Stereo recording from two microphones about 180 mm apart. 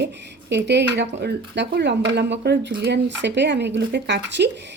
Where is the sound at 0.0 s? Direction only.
70° right (ahead or behind).